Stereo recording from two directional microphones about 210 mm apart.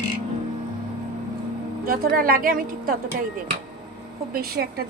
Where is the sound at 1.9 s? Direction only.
45° right (ahead or behind).